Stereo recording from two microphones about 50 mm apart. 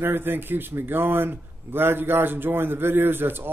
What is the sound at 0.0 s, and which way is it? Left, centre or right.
Speech, right.